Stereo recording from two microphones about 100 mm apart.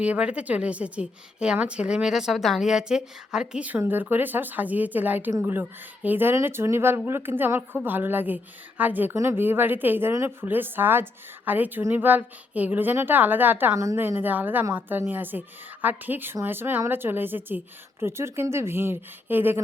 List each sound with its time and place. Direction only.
0.0 s a woman's voice: 10° right (ahead or behind)
13.7 s a woman's voice: 30° right (ahead or behind)
14.0 s a woman's voice: 20° right (ahead or behind)